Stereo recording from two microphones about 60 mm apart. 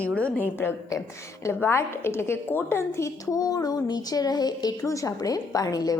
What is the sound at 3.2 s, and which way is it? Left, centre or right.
A woman's voice, left.